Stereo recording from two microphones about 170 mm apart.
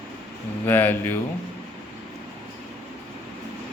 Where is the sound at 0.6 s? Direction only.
10° left (ahead or behind).